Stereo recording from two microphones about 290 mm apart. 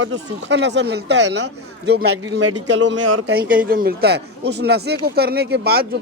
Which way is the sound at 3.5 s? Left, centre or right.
Right.